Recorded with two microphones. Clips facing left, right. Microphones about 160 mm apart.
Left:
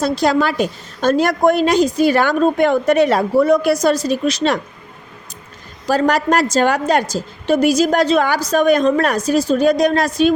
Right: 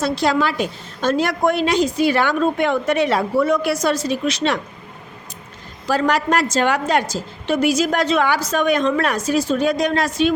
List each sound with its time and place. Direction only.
0.0 s a woman's voice: 40° left (ahead or behind)
5.9 s a woman's voice: 40° left (ahead or behind)